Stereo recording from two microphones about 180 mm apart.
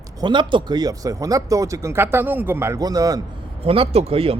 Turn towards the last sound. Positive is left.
turn(degrees=-35)  # may be behind; listen again after turning